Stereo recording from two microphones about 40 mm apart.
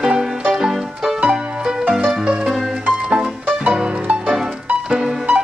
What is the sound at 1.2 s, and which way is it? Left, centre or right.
Music, right.